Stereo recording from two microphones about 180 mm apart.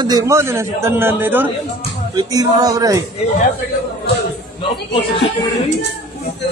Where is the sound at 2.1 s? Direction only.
20° right (ahead or behind).